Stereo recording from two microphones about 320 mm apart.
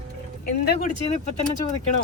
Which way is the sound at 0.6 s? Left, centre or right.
Left.